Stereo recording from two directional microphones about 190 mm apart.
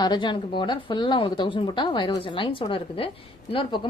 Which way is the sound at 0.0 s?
25° left (ahead or behind).